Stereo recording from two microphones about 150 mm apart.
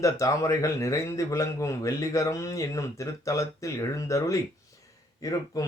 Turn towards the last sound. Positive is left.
turn(degrees=25)  # may be behind; listen again after turning